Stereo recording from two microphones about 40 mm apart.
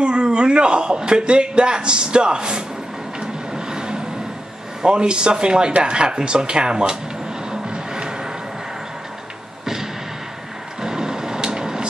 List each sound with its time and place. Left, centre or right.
0.0 s a man's voice: right
3.2 s a sound: centre
4.8 s a man's voice: right
7.6 s music: centre
10.8 s vehicle: centre